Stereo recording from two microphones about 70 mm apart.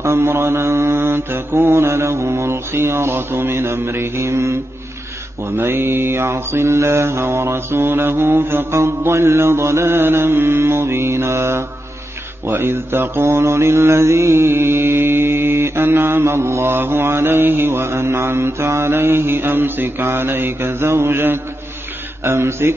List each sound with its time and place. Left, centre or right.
0.0 s mantra: right
5.6 s mantra: right